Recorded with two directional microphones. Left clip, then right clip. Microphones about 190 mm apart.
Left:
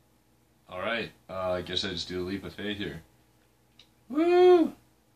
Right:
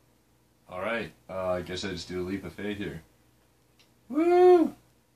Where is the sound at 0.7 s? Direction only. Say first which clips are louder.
Even; 10° right (ahead or behind).